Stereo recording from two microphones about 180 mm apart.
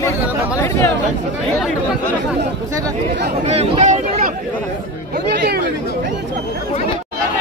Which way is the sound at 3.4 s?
35° right (ahead or behind).